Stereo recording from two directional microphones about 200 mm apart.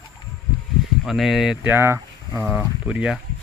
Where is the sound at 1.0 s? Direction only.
Centre (ahead or behind).